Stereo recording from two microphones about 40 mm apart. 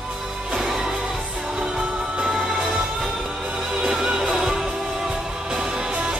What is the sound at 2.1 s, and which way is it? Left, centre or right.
Music, centre.